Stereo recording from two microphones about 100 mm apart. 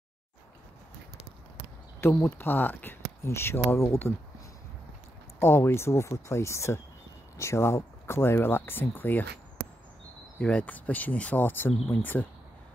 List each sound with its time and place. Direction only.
2.0 s speech: 20° left (ahead or behind)
5.4 s speech: 25° left (ahead or behind)
10.4 s speech: 15° left (ahead or behind)